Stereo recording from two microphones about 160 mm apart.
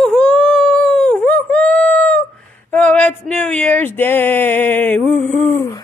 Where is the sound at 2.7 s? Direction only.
10° left (ahead or behind).